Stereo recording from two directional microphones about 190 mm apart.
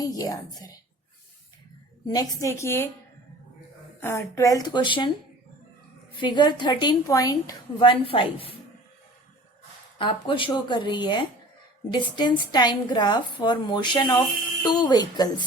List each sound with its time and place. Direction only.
0.0 s a woman's voice: 20° left (ahead or behind)
2.1 s a woman's voice: 15° left (ahead or behind)
4.0 s a woman's voice: 15° left (ahead or behind)
6.1 s a woman's voice: 25° left (ahead or behind)
10.0 s a woman's voice: 25° left (ahead or behind)